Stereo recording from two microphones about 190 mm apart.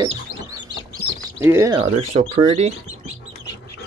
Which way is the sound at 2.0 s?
35° right (ahead or behind).